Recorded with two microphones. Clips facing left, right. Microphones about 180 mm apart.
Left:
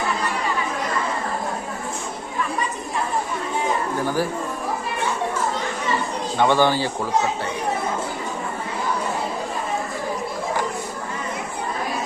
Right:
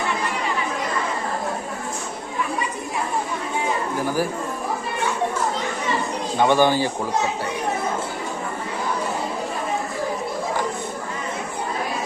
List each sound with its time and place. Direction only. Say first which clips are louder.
6.4 s speech: right 1 dB; 15° right (ahead or behind)